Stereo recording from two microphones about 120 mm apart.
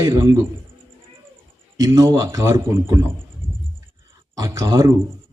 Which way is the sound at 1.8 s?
30° right (ahead or behind).